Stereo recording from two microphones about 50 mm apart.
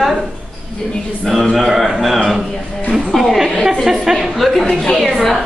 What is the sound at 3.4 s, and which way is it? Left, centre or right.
Speech, centre.